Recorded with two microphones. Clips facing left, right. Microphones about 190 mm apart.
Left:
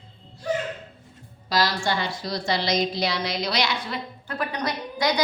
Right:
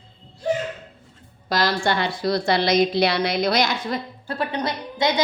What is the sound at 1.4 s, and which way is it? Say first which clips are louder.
A woman's voice: right 3 dB; 55° right (ahead or behind).